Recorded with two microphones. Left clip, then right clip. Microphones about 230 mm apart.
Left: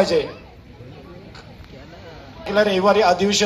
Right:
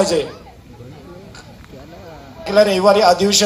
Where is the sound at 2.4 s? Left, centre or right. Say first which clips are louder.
Right 5 dB; right.